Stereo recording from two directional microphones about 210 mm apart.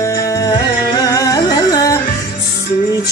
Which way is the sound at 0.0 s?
15° left (ahead or behind).